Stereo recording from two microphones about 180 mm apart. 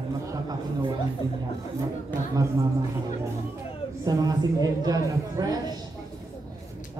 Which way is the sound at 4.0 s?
20° right (ahead or behind).